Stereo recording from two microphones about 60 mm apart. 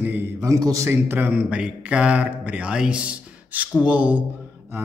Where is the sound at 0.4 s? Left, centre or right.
Right.